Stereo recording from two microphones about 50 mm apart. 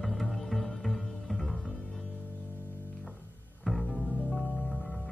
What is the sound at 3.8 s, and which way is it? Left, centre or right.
Music, centre.